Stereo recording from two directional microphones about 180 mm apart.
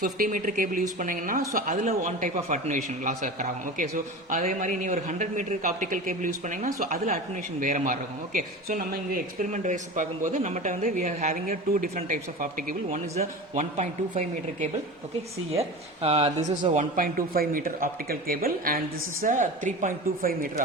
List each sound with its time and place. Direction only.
0.0 s a man's voice: 50° right (ahead or behind)
16.0 s a man's voice: 35° right (ahead or behind)